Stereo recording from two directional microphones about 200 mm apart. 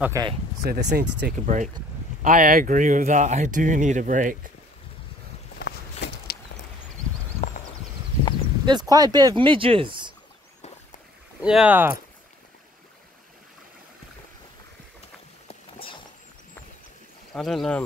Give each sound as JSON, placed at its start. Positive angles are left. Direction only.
{"t": 0.0, "sound": "speech", "side_deg": -15}
{"t": 0.7, "sound": "speech", "side_deg": -55}
{"t": 5.6, "sound": "walk", "side_deg": 55}
{"t": 8.6, "sound": "speech", "side_deg": -20}
{"t": 11.4, "sound": "speech", "side_deg": -5}
{"t": 17.3, "sound": "speech", "side_deg": 0}